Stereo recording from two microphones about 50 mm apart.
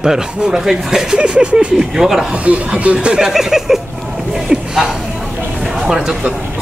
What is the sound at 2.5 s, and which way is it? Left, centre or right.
Speech, right.